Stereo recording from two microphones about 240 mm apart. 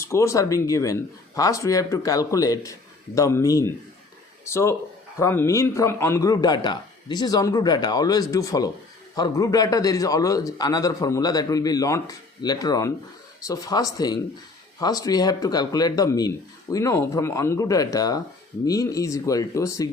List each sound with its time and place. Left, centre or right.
0.0 s a man's voice: centre